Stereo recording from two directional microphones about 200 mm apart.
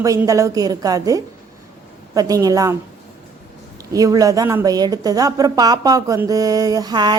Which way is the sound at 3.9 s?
15° right (ahead or behind).